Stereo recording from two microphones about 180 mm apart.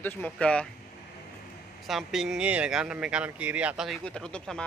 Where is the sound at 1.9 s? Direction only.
Centre (ahead or behind).